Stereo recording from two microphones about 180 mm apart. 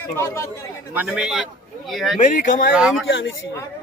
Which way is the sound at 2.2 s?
45° left (ahead or behind).